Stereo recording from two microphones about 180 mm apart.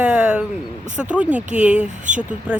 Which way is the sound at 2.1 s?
45° right (ahead or behind).